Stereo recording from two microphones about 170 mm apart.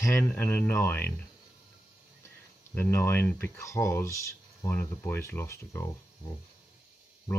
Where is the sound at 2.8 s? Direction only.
15° left (ahead or behind).